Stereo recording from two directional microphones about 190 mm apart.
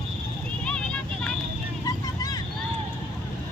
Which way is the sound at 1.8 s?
20° left (ahead or behind).